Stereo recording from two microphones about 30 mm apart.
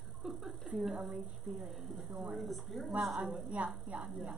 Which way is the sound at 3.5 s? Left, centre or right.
Right.